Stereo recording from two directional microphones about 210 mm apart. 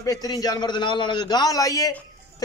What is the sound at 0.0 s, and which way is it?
A man's voice, 15° left (ahead or behind).